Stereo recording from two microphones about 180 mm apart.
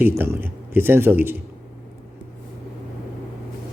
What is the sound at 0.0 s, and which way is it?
Speech, 15° right (ahead or behind).